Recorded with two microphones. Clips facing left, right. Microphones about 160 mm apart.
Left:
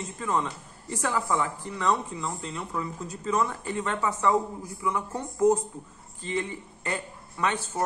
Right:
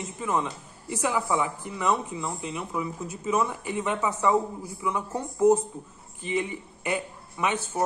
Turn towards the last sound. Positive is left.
turn(degrees=-15)  # may be behind; listen again after turning